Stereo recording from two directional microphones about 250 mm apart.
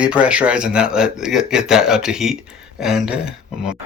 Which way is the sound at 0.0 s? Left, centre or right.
Centre.